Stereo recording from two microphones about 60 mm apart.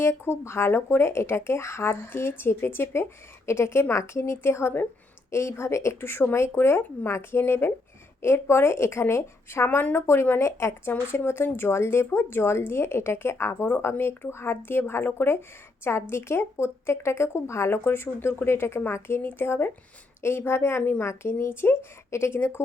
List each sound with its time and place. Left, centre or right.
0.0 s speech: left
5.3 s a woman's voice: left